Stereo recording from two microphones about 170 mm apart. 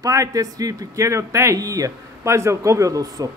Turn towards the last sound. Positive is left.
turn(degrees=-20)  # may be behind; listen again after turning